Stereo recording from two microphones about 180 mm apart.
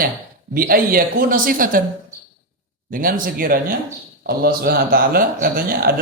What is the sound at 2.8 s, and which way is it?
A man's voice, 50° right (ahead or behind).